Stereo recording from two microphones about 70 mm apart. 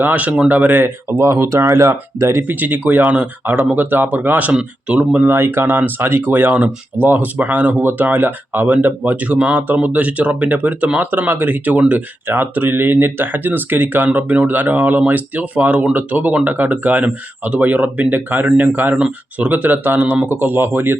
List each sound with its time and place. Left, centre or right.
0.0 s speech: right
1.2 s speech: right